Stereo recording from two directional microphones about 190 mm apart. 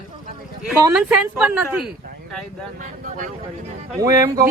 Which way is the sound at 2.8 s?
40° right (ahead or behind).